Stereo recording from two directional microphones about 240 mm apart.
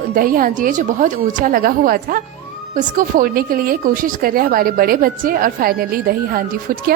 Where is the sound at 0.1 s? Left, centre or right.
Right.